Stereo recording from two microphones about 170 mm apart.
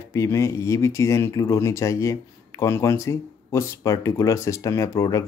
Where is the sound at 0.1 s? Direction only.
15° left (ahead or behind).